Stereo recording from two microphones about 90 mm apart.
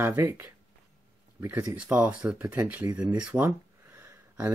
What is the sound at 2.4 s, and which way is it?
Speech, 35° right (ahead or behind).